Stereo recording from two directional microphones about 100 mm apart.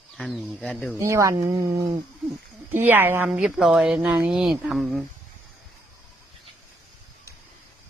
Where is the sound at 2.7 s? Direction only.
20° right (ahead or behind).